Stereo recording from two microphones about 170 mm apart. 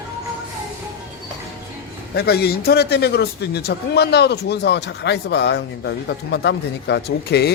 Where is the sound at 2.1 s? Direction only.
70° left (ahead or behind).